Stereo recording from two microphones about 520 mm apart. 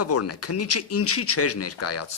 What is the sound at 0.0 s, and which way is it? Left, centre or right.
A man's voice, left.